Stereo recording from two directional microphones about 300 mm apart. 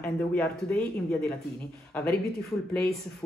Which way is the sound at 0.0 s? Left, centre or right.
Centre.